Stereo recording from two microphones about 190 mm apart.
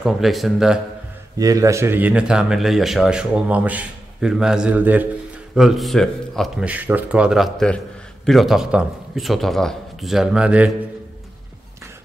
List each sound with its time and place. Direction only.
0.0 s speech: centre (ahead or behind)
1.4 s speech: 20° right (ahead or behind)